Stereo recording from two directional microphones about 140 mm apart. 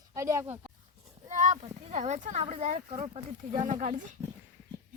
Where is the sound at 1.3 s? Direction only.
65° right (ahead or behind).